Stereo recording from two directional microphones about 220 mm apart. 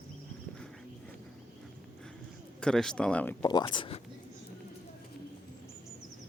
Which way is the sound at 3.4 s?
20° left (ahead or behind).